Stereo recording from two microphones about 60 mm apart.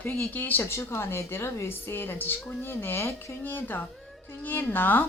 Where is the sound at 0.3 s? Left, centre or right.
Left.